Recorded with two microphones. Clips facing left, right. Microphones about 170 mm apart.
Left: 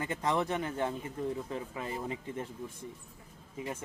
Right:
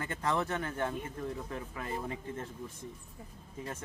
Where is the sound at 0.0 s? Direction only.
15° left (ahead or behind).